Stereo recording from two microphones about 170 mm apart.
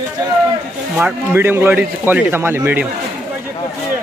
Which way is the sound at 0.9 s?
10° right (ahead or behind).